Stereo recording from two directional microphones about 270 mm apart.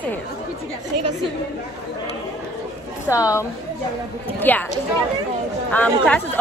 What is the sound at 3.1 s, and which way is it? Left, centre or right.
Speech, centre.